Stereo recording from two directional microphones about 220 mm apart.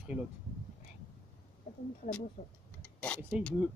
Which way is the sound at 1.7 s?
35° left (ahead or behind).